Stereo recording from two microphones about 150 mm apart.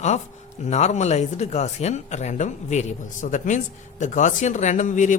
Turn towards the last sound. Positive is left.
turn(degrees=55)  # may be behind; listen again after turning